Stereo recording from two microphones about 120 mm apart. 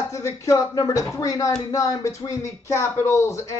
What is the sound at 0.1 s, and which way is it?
Speech, 25° left (ahead or behind).